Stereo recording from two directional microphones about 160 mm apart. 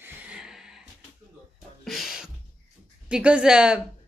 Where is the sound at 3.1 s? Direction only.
5° right (ahead or behind).